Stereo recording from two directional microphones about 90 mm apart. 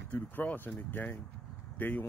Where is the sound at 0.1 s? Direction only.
20° left (ahead or behind).